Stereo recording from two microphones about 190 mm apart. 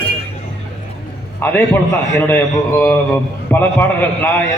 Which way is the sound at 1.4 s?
10° left (ahead or behind).